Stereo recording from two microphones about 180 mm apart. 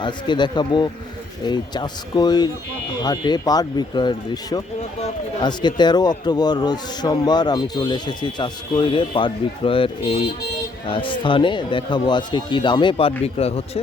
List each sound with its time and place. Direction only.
0.0 s a man's voice: 25° left (ahead or behind)